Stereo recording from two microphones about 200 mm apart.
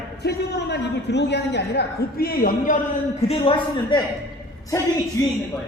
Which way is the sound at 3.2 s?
25° left (ahead or behind).